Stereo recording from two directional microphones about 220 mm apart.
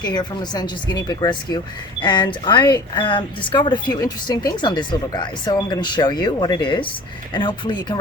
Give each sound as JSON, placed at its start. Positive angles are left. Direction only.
{"t": 0.0, "sound": "speech", "side_deg": 20}